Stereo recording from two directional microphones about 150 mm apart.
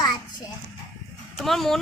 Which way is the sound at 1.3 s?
Centre (ahead or behind).